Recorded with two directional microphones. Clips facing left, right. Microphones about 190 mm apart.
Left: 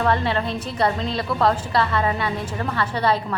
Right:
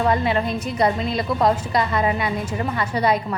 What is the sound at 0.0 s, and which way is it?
A woman's voice, 10° right (ahead or behind).